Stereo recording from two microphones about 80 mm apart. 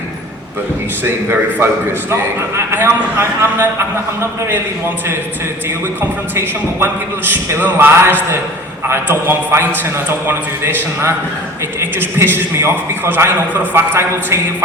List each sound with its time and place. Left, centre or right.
1.0 s a man's voice: right
6.0 s a man's voice: right
11.8 s a man's voice: right